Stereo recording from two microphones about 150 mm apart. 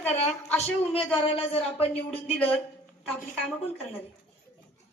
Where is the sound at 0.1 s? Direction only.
45° left (ahead or behind).